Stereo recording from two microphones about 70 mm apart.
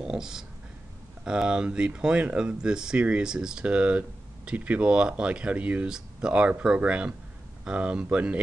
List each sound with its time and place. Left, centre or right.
0.0 s speech: centre